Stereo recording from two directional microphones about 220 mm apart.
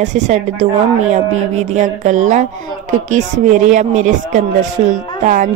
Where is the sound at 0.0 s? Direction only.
35° right (ahead or behind).